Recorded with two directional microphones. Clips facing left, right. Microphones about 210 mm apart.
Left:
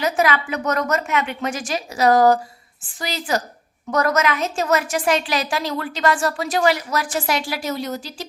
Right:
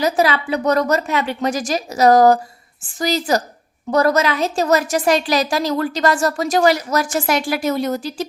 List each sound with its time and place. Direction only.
0.0 s a woman's voice: 35° right (ahead or behind); by 8.3 s 50° right (ahead or behind)